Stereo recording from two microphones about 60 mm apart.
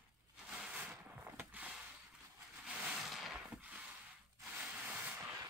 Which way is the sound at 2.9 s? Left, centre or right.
Centre.